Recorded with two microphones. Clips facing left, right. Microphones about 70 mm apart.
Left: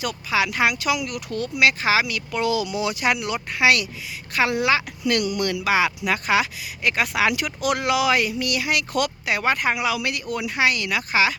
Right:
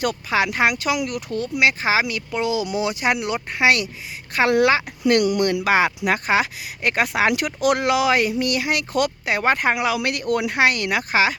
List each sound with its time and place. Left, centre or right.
0.0 s speech: right
4.4 s a woman's voice: right
4.7 s speech: right